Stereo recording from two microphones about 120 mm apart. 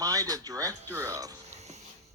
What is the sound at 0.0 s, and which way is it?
Speech, 30° right (ahead or behind).